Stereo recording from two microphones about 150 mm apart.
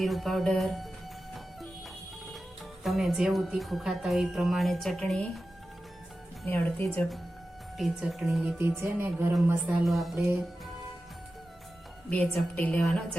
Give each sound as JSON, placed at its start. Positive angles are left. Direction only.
{"t": 0.0, "sound": "speech", "side_deg": 0}
{"t": 2.8, "sound": "speech", "side_deg": 0}
{"t": 6.4, "sound": "a woman's voice", "side_deg": 10}
{"t": 7.8, "sound": "speech", "side_deg": 0}
{"t": 8.5, "sound": "speech", "side_deg": -15}
{"t": 9.8, "sound": "speech", "side_deg": 0}
{"t": 12.1, "sound": "a woman's voice", "side_deg": 5}